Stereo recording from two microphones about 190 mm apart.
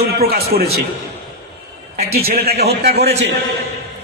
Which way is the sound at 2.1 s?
55° right (ahead or behind).